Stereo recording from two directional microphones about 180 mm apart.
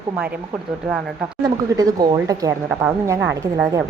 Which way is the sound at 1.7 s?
20° right (ahead or behind).